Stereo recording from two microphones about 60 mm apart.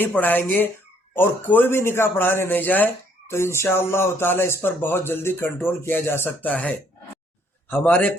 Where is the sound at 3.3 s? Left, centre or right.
Left.